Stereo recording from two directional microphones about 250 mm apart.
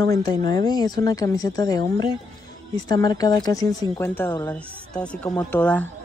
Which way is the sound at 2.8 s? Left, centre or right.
Centre.